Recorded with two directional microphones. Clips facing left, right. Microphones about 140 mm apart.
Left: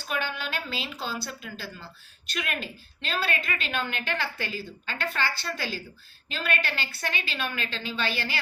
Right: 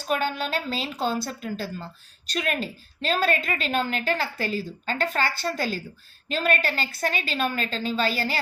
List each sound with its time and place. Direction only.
0.1 s a woman's voice: 40° right (ahead or behind)